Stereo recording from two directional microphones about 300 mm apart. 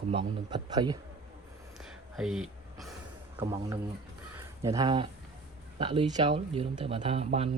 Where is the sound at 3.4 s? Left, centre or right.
Centre.